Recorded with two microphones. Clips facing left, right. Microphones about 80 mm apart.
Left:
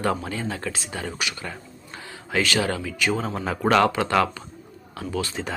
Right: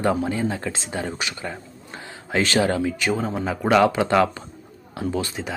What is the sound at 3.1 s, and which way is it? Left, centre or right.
Speech, centre.